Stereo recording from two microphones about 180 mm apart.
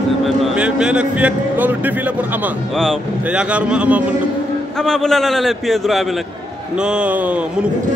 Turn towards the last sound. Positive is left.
turn(degrees=-10)  # may be behind; listen again after turning